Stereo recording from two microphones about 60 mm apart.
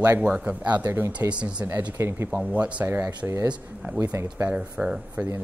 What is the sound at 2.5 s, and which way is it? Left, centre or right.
Speech, right.